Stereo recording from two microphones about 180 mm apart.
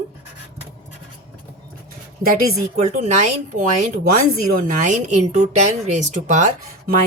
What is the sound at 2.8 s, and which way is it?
A woman's voice, 40° right (ahead or behind).